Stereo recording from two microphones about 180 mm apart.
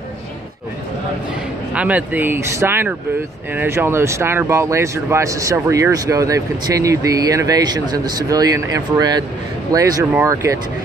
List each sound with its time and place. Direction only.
1.7 s speech: 10° right (ahead or behind)